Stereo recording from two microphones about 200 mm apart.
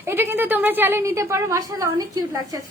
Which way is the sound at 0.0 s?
10° right (ahead or behind).